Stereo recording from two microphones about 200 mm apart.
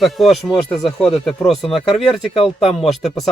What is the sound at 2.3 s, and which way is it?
Speech, 30° left (ahead or behind).